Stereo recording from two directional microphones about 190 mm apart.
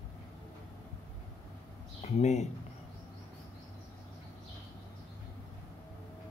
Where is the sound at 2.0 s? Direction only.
35° left (ahead or behind).